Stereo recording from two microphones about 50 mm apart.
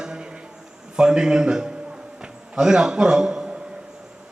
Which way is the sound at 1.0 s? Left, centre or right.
Centre.